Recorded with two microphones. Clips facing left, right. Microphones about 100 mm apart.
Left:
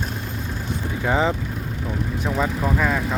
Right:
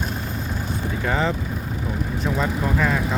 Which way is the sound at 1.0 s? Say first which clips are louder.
Left 3 dB; 15° left (ahead or behind).